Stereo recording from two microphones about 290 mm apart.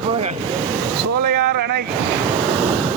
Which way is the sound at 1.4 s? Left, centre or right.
Right.